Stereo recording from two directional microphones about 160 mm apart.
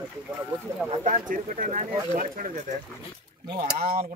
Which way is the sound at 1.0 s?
55° right (ahead or behind).